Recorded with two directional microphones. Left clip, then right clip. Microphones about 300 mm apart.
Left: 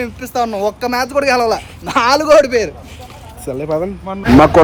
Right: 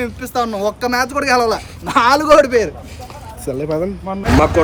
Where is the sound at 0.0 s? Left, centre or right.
Centre.